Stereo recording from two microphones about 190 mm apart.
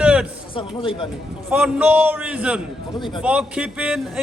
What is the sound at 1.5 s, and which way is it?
A man's voice, 10° right (ahead or behind).